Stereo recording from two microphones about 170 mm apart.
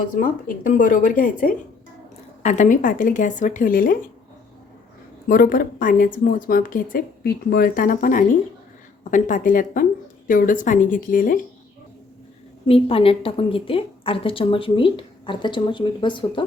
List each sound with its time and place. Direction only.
0.0 s a woman's voice: 50° left (ahead or behind)
5.3 s a woman's voice: 55° left (ahead or behind)
12.6 s a woman's voice: 35° left (ahead or behind)